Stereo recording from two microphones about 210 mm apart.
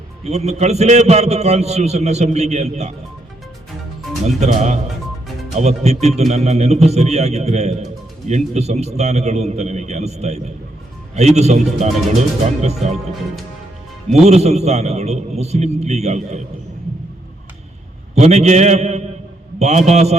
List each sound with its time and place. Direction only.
0.3 s a man's voice: 30° right (ahead or behind)
4.4 s a man's voice: 35° right (ahead or behind)
12.6 s a man's voice: 30° right (ahead or behind)
14.1 s a man's voice: 30° right (ahead or behind)
18.1 s a man's voice: 30° right (ahead or behind)